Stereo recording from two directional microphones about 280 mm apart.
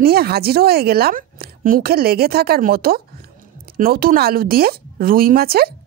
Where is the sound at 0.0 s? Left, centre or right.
Right.